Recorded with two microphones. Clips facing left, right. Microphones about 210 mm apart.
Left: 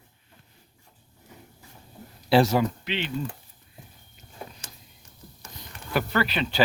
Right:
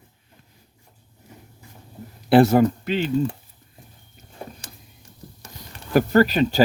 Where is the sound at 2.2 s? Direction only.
55° right (ahead or behind).